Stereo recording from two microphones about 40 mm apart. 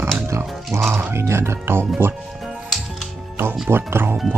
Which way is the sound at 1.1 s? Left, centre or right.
Right.